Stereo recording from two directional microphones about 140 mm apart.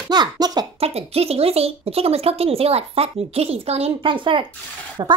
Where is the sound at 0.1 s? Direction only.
30° right (ahead or behind).